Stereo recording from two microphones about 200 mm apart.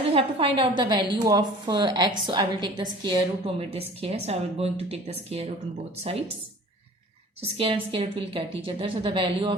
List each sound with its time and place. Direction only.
0.1 s speech: 30° right (ahead or behind)
7.4 s speech: 25° right (ahead or behind)